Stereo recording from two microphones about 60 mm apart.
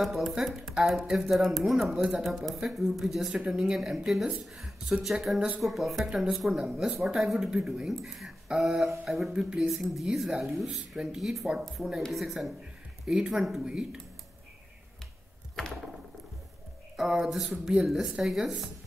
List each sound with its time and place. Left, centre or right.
0.2 s a woman's voice: centre
16.9 s a woman's voice: centre